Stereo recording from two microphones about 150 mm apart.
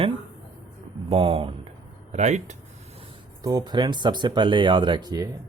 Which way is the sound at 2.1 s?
50° right (ahead or behind).